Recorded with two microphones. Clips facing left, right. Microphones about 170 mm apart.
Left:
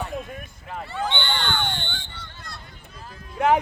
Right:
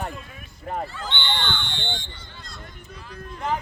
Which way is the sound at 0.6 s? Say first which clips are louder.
Right 7 dB; 50° right (ahead or behind).